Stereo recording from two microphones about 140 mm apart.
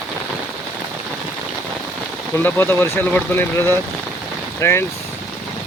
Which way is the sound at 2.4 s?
15° left (ahead or behind).